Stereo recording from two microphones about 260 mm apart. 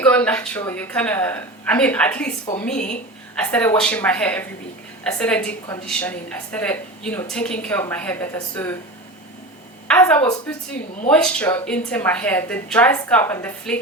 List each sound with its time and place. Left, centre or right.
0.0 s a woman's voice: centre
2.7 s a woman's voice: left
3.4 s a woman's voice: centre
9.9 s a woman's voice: centre